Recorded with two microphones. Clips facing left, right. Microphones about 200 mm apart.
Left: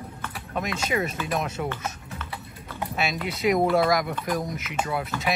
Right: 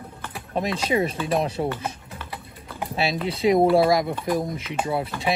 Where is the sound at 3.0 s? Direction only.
30° right (ahead or behind).